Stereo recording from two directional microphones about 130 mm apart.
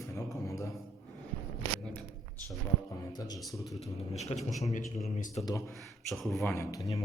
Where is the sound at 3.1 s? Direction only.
30° left (ahead or behind).